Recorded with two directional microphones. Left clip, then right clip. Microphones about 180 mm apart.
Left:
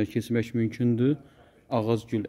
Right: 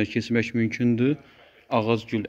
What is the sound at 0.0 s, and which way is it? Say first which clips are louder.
Speech: right 3 dB; 10° left (ahead or behind).